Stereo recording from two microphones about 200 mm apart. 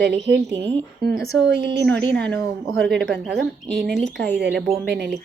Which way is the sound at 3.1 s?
60° right (ahead or behind).